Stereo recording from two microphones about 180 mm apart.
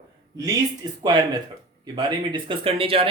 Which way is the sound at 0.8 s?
25° right (ahead or behind).